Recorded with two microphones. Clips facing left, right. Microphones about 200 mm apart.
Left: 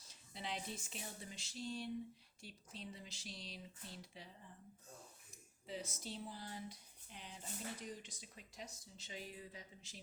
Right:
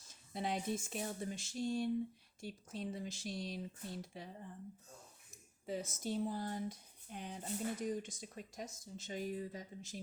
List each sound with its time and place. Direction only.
0.1 s speech: 50° right (ahead or behind)
5.6 s speech: 45° right (ahead or behind)